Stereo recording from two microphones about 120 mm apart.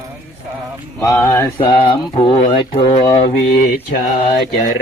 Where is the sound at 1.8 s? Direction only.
45° left (ahead or behind).